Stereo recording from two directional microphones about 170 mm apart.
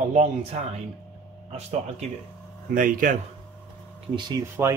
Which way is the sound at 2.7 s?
50° right (ahead or behind).